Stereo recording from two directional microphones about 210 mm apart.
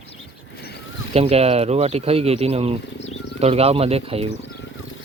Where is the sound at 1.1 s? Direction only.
30° right (ahead or behind).